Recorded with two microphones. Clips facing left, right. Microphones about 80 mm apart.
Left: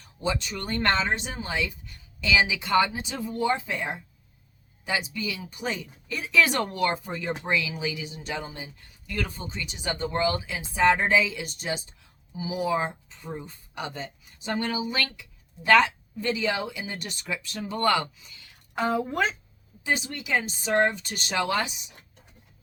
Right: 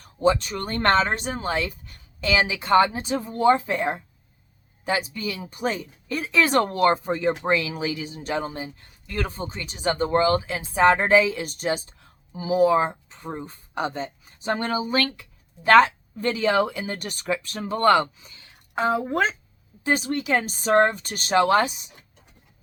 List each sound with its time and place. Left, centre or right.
0.0 s speech: right
18.0 s a sound: right
18.9 s speech: right
19.8 s speech: right